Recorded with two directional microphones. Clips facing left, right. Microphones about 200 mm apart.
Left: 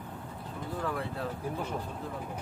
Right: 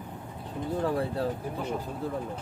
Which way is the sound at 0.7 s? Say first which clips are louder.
Right 6 dB; 30° right (ahead or behind).